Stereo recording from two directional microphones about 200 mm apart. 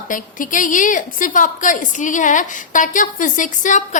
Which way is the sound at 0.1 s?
40° left (ahead or behind).